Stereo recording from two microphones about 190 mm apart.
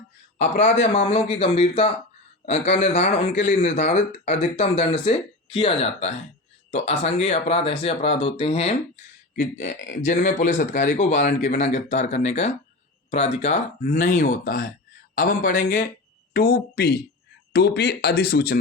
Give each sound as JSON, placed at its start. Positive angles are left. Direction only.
{"t": 0.3, "sound": "speech", "side_deg": 40}
{"t": 9.3, "sound": "speech", "side_deg": 45}